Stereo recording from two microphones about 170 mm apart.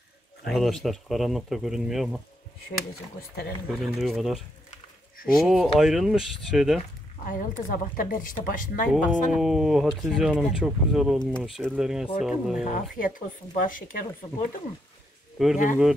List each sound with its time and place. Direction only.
0.5 s speech: centre (ahead or behind)
2.9 s speech: 65° left (ahead or behind)
3.8 s speech: 5° right (ahead or behind)
7.2 s speech: 50° left (ahead or behind)
8.9 s speech: 5° right (ahead or behind)
12.9 s speech: 55° left (ahead or behind)
15.5 s speech: 50° left (ahead or behind)